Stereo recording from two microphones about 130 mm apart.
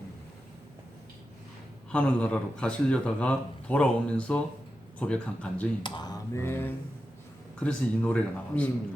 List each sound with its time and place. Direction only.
1.9 s a man's voice: 10° left (ahead or behind)
5.8 s speech: 35° left (ahead or behind)
6.3 s a man's voice: 20° left (ahead or behind)